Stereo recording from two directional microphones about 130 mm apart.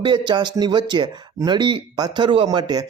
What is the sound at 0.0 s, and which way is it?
Speech, 35° right (ahead or behind).